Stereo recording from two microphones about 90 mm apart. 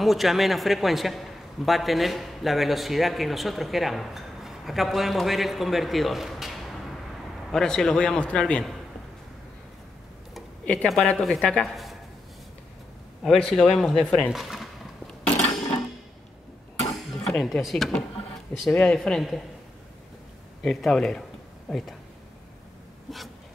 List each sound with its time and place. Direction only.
0.0 s a man's voice: centre (ahead or behind)
10.6 s a man's voice: 15° left (ahead or behind)
11.6 s a sound: centre (ahead or behind)
13.2 s a man's voice: 5° left (ahead or behind)
16.9 s music: centre (ahead or behind)
18.7 s a man's voice: 10° left (ahead or behind)
20.6 s a man's voice: 5° left (ahead or behind)
23.0 s a sound: centre (ahead or behind)